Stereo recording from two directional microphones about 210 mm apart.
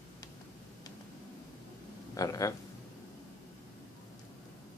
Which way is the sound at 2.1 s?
15° left (ahead or behind).